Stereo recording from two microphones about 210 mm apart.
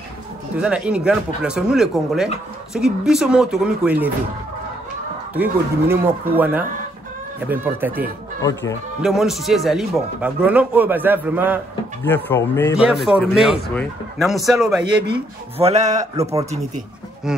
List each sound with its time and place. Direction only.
0.6 s speech: 5° right (ahead or behind)
5.3 s a man's voice: 10° right (ahead or behind)
8.4 s speech: 15° left (ahead or behind)
9.0 s a man's voice: centre (ahead or behind)
12.1 s speech: 10° left (ahead or behind)
12.7 s speech: centre (ahead or behind)
15.5 s a man's voice: 30° right (ahead or behind)